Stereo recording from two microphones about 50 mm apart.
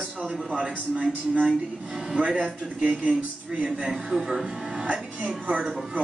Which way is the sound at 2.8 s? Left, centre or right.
Right.